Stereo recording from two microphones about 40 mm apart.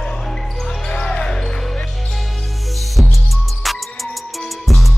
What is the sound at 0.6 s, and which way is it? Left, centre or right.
Basketball bounce, centre.